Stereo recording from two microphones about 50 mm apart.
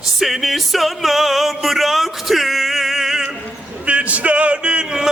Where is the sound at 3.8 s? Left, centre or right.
Right.